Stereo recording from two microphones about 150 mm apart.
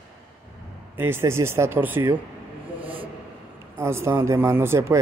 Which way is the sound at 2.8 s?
35° right (ahead or behind).